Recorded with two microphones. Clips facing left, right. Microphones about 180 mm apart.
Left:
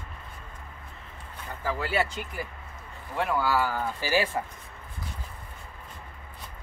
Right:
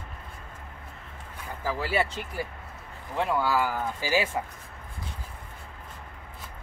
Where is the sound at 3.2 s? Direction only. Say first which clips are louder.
Even; 20° right (ahead or behind).